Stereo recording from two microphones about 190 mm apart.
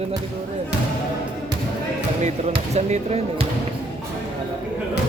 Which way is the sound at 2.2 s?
35° right (ahead or behind).